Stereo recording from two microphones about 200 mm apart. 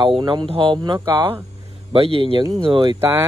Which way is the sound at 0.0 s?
25° right (ahead or behind).